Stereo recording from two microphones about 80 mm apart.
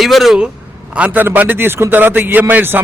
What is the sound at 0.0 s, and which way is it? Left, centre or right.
Speech, centre.